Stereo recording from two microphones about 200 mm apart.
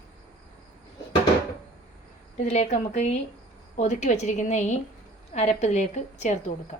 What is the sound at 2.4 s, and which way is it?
A woman's voice, 35° left (ahead or behind).